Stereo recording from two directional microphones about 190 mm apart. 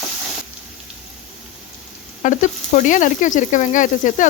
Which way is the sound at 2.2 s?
40° left (ahead or behind).